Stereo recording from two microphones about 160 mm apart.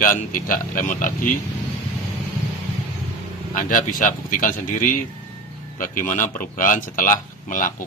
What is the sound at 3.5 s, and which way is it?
Speech, 55° left (ahead or behind).